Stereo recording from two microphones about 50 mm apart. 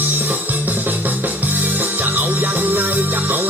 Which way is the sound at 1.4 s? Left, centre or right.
Right.